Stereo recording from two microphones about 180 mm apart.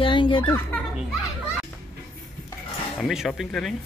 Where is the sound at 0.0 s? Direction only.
30° left (ahead or behind).